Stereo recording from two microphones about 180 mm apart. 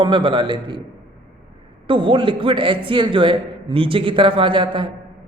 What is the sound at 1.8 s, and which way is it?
A man's voice, 30° right (ahead or behind).